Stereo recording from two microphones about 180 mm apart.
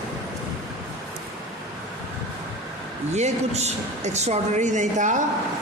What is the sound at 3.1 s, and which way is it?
A woman's voice, 40° right (ahead or behind).